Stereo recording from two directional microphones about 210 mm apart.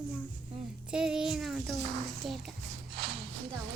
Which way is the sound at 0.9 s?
5° right (ahead or behind).